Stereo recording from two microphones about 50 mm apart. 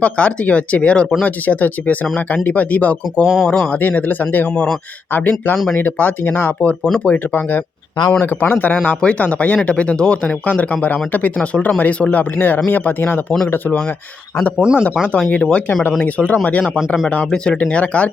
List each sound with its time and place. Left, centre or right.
0.0 s speech: left
3.4 s speech: centre
3.7 s speech: left
9.0 s speech: left
10.4 s speech: left
14.6 s speech: centre
15.4 s speech: centre
16.0 s speech: left
17.3 s speech: centre